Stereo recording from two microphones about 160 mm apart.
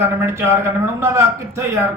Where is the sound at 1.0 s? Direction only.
15° right (ahead or behind).